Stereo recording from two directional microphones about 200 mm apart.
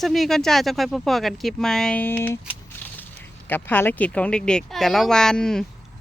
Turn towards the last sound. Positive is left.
turn(degrees=5)  # may be behind; listen again after turning